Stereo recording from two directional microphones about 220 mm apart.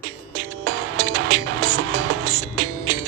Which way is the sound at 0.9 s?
90° right.